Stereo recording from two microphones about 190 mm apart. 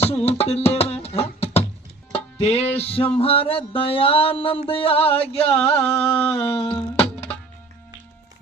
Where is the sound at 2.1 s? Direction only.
35° left (ahead or behind).